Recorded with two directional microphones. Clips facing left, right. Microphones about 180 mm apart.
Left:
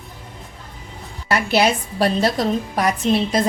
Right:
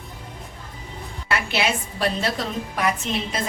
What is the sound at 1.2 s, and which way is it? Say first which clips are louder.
A woman's voice: left 7 dB; 40° left (ahead or behind).